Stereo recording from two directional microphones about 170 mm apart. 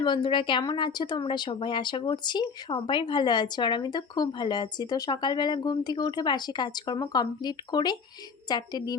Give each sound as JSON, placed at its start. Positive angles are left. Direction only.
{"t": 0.0, "sound": "a woman's voice", "side_deg": 30}